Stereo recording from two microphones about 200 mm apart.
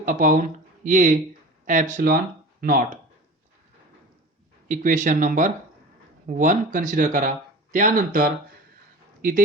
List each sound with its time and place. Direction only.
0.0 s speech: 40° right (ahead or behind)
4.7 s speech: 40° right (ahead or behind)